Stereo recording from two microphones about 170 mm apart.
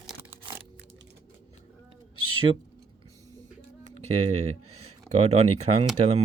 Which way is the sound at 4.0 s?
40° right (ahead or behind).